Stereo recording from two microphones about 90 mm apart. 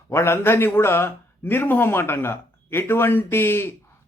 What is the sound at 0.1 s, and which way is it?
A man's voice, 30° left (ahead or behind).